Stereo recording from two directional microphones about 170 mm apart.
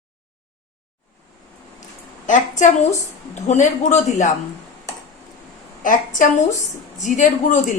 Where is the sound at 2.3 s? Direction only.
45° left (ahead or behind).